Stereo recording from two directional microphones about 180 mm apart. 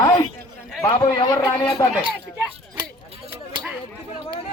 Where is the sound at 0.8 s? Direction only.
20° left (ahead or behind).